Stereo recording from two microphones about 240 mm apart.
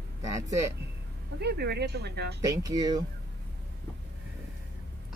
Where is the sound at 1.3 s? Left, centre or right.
Right.